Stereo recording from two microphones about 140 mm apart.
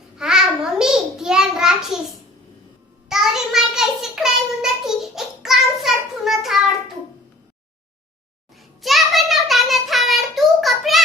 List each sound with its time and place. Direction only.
0.2 s a sound: 5° right (ahead or behind)
3.1 s child singing: 5° right (ahead or behind)
8.8 s child singing: centre (ahead or behind)